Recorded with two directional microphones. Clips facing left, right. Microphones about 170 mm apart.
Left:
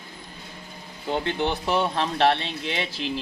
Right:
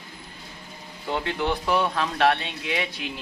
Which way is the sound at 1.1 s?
25° left (ahead or behind).